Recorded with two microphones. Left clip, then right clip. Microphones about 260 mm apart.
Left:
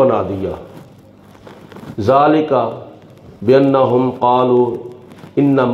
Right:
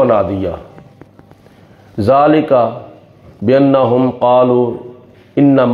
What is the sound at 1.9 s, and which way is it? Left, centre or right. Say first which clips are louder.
Speech: right 2 dB; right.